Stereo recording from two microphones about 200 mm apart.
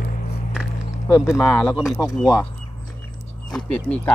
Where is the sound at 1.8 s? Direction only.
15° left (ahead or behind).